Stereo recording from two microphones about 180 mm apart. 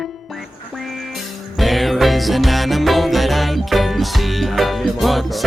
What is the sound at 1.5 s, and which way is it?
Music, centre (ahead or behind).